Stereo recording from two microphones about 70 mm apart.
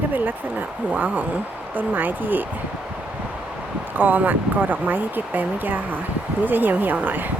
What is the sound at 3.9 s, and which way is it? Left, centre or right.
Speech, right.